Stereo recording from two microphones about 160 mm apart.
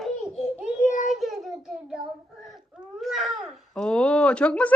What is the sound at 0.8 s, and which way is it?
Child singing, 50° left (ahead or behind).